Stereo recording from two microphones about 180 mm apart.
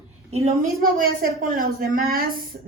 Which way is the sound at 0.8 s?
50° right (ahead or behind).